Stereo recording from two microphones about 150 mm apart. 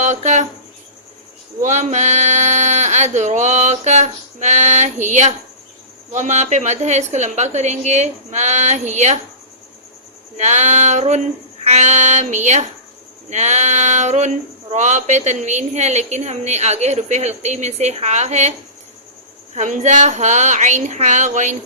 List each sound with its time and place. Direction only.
0.0 s cricket: 50° right (ahead or behind)
1.6 s a sound: 50° right (ahead or behind)
6.1 s a woman's voice: 50° right (ahead or behind)
10.3 s a woman's voice: 50° right (ahead or behind)
19.5 s a woman's voice: 55° right (ahead or behind)